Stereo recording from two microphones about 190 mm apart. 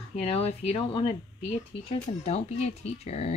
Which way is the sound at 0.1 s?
30° left (ahead or behind).